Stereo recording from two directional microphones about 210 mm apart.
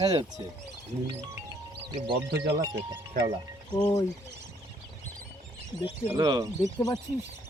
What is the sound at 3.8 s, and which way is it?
Speech, 15° left (ahead or behind).